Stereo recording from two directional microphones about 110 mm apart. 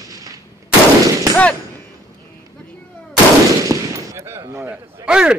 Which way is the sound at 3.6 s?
30° right (ahead or behind).